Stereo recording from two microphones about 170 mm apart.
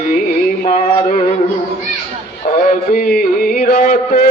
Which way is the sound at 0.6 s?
50° left (ahead or behind).